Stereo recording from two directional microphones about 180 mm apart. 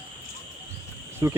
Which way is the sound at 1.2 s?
20° right (ahead or behind).